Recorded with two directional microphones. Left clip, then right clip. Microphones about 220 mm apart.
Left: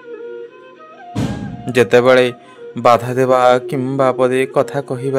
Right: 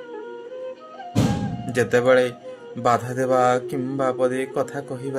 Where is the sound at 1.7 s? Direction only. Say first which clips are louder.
Left 7 dB; 40° left (ahead or behind).